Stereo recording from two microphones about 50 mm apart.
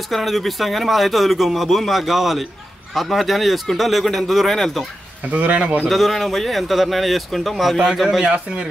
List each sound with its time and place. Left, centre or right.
0.1 s speech: centre
5.3 s a man's voice: right
5.9 s speech: centre
8.3 s a man's voice: centre